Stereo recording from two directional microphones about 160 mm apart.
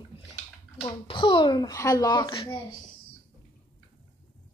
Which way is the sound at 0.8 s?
30° left (ahead or behind).